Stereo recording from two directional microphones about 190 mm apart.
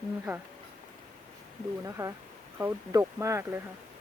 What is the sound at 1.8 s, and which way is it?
Speech, 15° right (ahead or behind).